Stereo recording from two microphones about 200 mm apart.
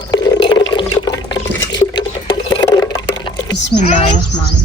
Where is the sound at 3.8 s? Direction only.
35° left (ahead or behind).